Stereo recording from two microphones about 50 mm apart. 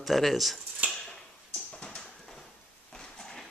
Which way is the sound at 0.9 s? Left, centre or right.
Centre.